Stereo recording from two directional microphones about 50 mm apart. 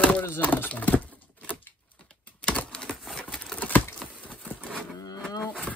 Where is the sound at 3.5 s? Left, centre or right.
Left.